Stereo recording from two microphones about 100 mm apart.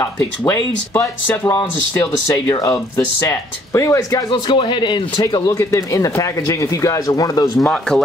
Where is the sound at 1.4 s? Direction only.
35° left (ahead or behind).